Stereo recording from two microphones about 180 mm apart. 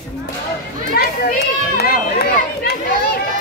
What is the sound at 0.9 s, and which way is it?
Speech, 60° left (ahead or behind).